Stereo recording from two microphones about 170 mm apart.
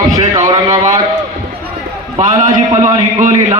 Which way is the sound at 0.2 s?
45° right (ahead or behind).